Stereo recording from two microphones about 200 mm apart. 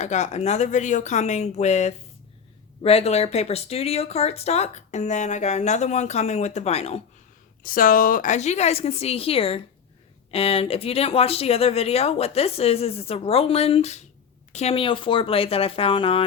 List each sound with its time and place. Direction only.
0.0 s speech: 35° left (ahead or behind)
7.6 s speech: 45° left (ahead or behind); by 16.2 s 25° left (ahead or behind)